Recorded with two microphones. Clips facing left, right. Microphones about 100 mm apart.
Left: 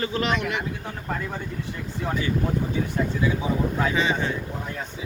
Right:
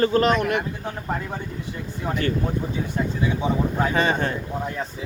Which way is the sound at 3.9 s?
50° right (ahead or behind).